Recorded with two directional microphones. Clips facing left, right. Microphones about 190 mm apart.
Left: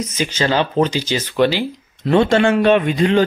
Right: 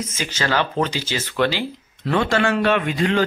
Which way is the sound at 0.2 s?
20° left (ahead or behind).